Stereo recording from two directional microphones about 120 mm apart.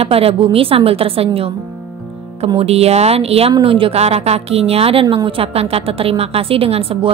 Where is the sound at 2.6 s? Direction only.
60° right (ahead or behind).